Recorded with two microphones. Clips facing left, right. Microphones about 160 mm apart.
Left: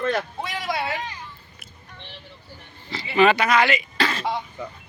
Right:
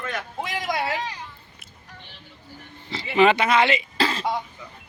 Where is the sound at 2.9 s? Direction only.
20° right (ahead or behind).